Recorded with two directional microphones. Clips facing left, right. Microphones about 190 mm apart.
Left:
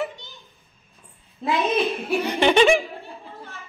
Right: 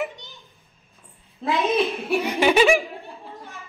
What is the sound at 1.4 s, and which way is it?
Speech, centre (ahead or behind).